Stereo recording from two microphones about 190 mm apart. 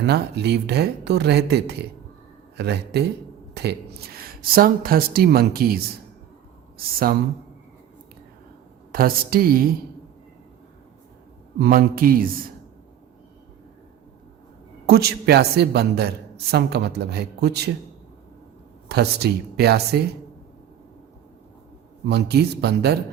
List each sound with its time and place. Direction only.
0.0 s a man's voice: 60° right (ahead or behind)
8.9 s speech: 50° right (ahead or behind)
11.6 s speech: 50° right (ahead or behind)
14.8 s a man's voice: 55° right (ahead or behind)
18.9 s a man's voice: 60° right (ahead or behind)
22.0 s a man's voice: 60° right (ahead or behind)